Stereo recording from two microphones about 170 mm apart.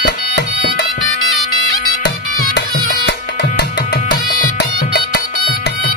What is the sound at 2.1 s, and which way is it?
Music, 60° left (ahead or behind).